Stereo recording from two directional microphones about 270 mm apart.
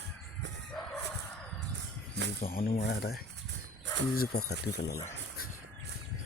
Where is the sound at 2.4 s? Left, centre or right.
Left.